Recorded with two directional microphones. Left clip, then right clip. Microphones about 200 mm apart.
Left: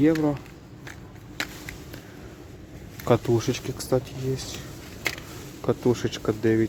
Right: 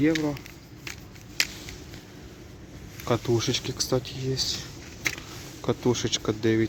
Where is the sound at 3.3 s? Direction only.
5° left (ahead or behind).